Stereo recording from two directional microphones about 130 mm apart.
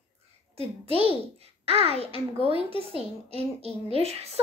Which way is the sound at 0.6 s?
50° right (ahead or behind).